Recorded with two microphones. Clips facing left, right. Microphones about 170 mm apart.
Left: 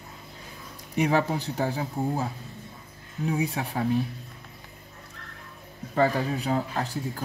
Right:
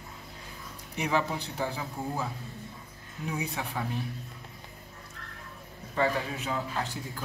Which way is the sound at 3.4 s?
35° left (ahead or behind).